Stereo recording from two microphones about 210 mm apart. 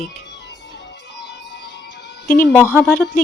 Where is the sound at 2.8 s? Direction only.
5° left (ahead or behind).